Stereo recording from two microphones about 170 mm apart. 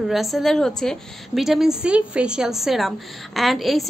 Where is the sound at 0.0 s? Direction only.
Centre (ahead or behind).